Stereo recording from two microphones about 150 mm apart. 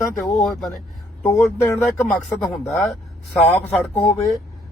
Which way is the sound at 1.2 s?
15° left (ahead or behind).